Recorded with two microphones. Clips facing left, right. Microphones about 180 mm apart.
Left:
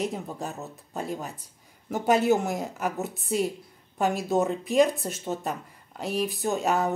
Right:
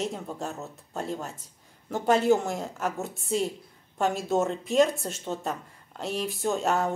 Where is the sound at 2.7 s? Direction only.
15° left (ahead or behind).